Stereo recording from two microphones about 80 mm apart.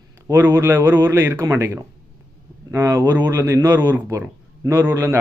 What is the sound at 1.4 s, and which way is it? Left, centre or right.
Speech, right.